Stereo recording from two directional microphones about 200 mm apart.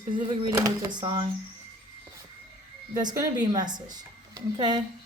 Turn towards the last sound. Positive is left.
turn(degrees=-20)  # may be behind; listen again after turning